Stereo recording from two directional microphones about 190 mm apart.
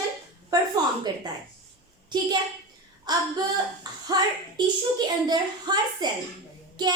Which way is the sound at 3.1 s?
20° right (ahead or behind).